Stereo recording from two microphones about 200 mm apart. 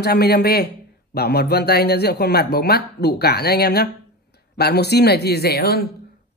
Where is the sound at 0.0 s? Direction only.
55° left (ahead or behind).